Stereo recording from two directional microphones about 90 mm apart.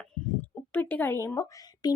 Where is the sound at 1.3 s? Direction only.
45° left (ahead or behind).